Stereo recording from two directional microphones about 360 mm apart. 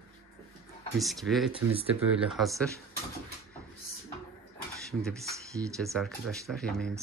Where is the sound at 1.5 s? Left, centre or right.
Centre.